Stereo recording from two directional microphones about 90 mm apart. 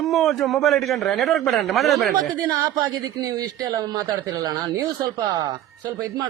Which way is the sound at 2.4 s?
45° right (ahead or behind).